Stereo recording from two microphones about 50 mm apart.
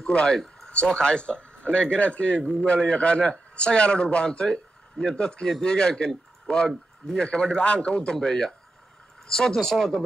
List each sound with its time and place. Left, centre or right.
0.0 s a man's voice: left; by 10.0 s centre